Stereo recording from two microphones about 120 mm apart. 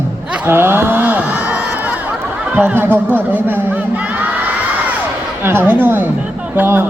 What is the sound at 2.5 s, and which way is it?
Speech, 15° right (ahead or behind).